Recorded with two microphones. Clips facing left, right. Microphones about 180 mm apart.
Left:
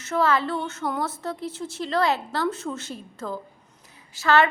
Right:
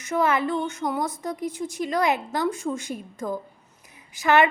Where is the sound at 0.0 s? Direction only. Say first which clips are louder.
Even; 15° right (ahead or behind).